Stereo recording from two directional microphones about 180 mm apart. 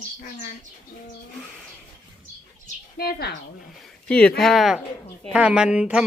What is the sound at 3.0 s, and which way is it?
Speech, 60° left (ahead or behind).